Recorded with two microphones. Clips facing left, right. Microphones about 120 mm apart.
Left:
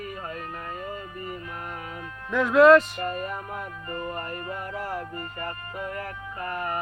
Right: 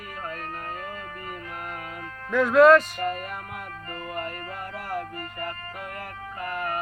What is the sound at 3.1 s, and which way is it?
Music, 30° left (ahead or behind).